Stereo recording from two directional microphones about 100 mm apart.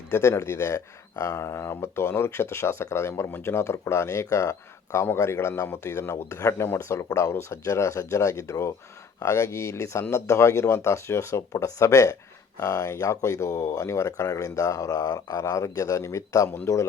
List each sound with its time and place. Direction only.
0.1 s a man's voice: 30° left (ahead or behind)